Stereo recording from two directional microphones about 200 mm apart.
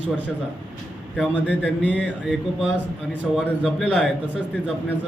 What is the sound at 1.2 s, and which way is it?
Speech, 5° left (ahead or behind).